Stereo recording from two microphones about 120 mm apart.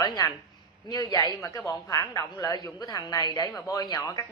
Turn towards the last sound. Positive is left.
turn(degrees=25)  # may be behind; listen again after turning